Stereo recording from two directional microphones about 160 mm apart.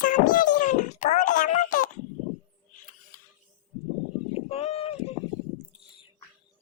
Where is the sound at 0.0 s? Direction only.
60° left (ahead or behind).